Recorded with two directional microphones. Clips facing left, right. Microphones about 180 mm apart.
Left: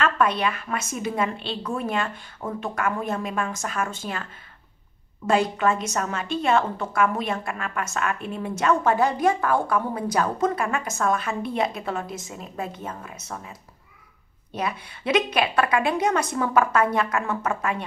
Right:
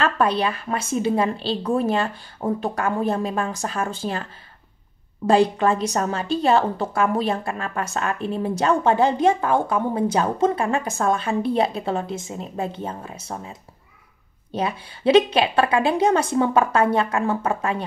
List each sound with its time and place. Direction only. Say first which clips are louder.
0.0 s a woman's voice: right 2 dB; 35° right (ahead or behind)